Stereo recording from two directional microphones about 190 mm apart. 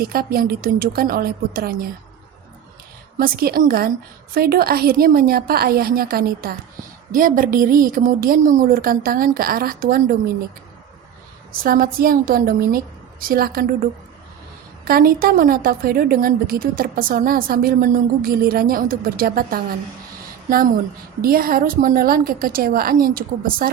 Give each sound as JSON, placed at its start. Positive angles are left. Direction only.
{"t": 0.0, "sound": "a woman's voice", "side_deg": -55}
{"t": 3.2, "sound": "a woman's voice", "side_deg": -50}
{"t": 11.5, "sound": "a woman's voice", "side_deg": -50}
{"t": 14.8, "sound": "a woman's voice", "side_deg": -50}
{"t": 21.2, "sound": "a woman's voice", "side_deg": -50}